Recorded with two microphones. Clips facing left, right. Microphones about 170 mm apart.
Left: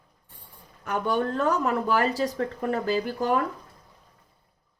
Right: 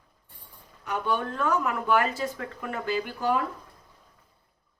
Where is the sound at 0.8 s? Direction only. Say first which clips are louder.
Left 3 dB; 45° left (ahead or behind).